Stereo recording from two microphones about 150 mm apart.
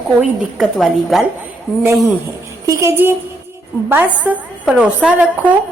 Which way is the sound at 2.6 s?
20° right (ahead or behind).